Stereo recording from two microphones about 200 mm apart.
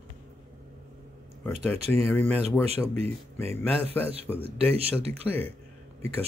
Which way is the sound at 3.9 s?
10° left (ahead or behind).